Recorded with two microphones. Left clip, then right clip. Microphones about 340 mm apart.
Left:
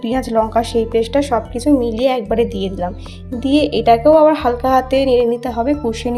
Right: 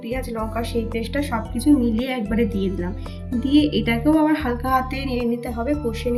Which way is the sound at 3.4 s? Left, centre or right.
Left.